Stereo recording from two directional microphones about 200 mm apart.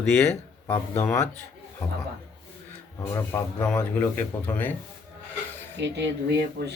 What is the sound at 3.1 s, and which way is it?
Speech, 15° left (ahead or behind).